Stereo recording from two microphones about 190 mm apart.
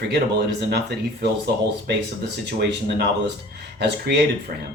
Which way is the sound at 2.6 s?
60° right (ahead or behind).